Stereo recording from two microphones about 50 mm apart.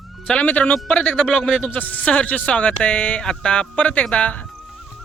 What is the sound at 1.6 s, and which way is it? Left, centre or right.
Speech, left.